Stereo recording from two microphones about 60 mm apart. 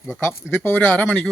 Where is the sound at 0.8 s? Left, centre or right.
Centre.